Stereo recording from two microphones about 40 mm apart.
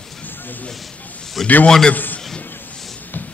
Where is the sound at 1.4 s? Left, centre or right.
Centre.